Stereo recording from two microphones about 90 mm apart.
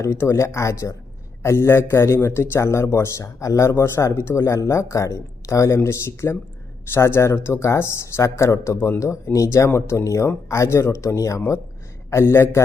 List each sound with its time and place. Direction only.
0.0 s a man's voice: 30° left (ahead or behind)